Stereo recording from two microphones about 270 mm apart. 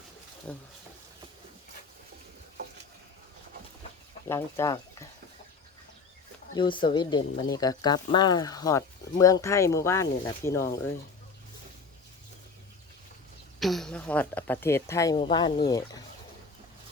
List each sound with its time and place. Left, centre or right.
0.5 s speech: centre
4.3 s speech: centre
6.6 s speech: centre
13.6 s speech: centre